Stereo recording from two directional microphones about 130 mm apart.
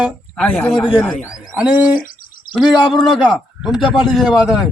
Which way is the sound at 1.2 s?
10° right (ahead or behind).